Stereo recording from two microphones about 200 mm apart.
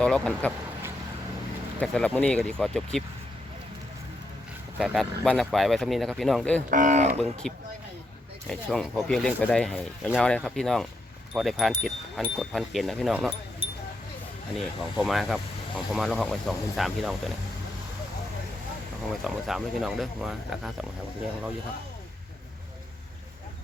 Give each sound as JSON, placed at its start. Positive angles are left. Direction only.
{"t": 0.0, "sound": "speech", "side_deg": 5}
{"t": 1.8, "sound": "speech", "side_deg": 5}
{"t": 4.8, "sound": "speech", "side_deg": 0}
{"t": 6.7, "sound": "speech", "side_deg": -40}
{"t": 7.4, "sound": "speech", "side_deg": 0}
{"t": 8.7, "sound": "speech", "side_deg": 0}
{"t": 14.5, "sound": "speech", "side_deg": 0}
{"t": 19.2, "sound": "speech", "side_deg": 0}